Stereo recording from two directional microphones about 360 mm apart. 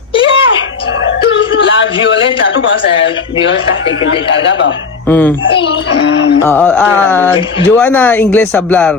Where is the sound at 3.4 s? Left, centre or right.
Left.